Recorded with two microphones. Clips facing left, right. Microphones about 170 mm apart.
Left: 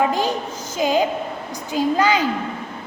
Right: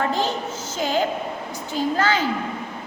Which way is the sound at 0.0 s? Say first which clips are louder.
Left 3 dB; 15° left (ahead or behind).